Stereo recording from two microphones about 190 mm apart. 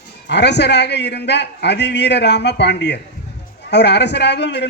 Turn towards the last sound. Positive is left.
turn(degrees=65)  # may be behind; listen again after turning